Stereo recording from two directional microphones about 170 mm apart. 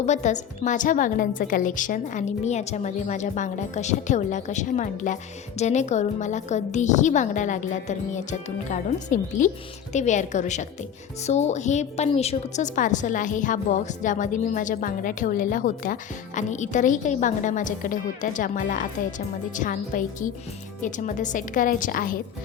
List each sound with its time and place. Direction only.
0.0 s a woman's voice: 45° left (ahead or behind)